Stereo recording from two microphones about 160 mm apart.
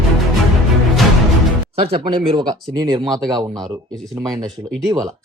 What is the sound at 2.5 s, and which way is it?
Speech, 25° right (ahead or behind).